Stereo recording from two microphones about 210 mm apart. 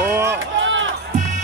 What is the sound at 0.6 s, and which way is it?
Music, 65° right (ahead or behind).